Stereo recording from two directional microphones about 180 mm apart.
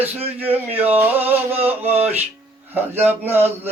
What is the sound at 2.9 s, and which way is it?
Male singing, 10° right (ahead or behind).